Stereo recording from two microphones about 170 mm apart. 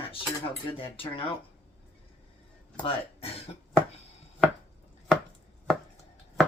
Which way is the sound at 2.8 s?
35° left (ahead or behind).